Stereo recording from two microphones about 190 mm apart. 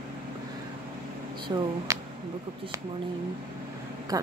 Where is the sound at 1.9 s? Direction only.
15° right (ahead or behind).